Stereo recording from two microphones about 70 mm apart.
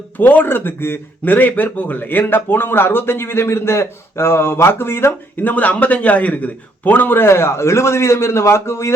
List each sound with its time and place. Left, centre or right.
0.2 s a man's voice: left